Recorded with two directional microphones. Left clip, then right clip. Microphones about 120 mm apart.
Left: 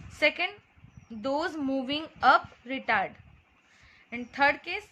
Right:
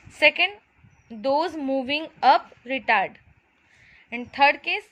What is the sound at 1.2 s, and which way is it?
A woman's voice, 30° right (ahead or behind).